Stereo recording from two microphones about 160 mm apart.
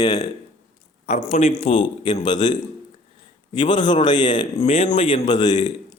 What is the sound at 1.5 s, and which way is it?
Speech, 30° left (ahead or behind).